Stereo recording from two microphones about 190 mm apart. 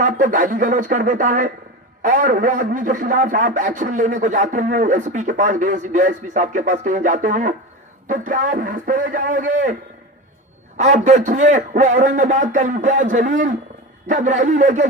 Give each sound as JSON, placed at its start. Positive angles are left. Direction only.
{"t": 0.0, "sound": "a man's voice", "side_deg": -45}
{"t": 10.8, "sound": "a man's voice", "side_deg": -40}